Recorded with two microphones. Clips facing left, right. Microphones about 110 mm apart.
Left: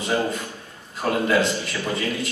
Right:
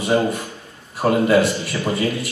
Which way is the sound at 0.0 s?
30° right (ahead or behind).